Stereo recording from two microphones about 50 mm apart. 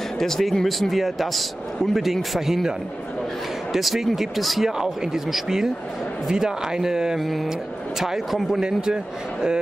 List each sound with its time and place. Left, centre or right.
0.2 s speech: centre
3.7 s speech: centre
7.2 s speech: centre
8.5 s speech: centre